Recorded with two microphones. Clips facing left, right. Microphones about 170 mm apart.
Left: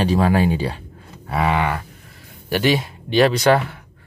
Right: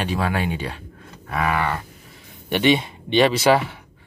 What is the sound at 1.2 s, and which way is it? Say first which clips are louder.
Cattle: left 3 dB; 30° left (ahead or behind).